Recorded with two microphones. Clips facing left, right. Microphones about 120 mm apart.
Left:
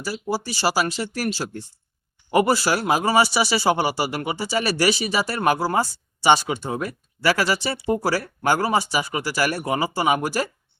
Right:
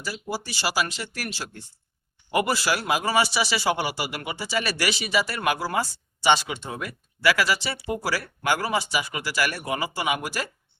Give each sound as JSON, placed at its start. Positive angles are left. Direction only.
{"t": 0.0, "sound": "speech", "side_deg": 35}